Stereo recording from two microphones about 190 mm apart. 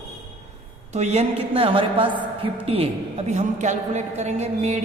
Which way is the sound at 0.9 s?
35° right (ahead or behind).